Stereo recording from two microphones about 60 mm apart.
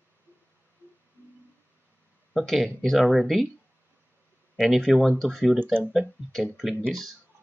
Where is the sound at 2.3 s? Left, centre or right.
Centre.